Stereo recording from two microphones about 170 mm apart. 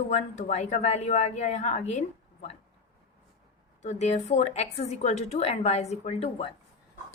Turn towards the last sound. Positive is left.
turn(degrees=35)  # may be behind; listen again after turning